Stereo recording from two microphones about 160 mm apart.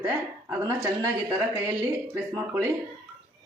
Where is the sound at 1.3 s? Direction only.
10° right (ahead or behind).